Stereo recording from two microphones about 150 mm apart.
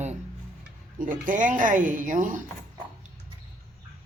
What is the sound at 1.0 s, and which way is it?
Speech, 60° right (ahead or behind).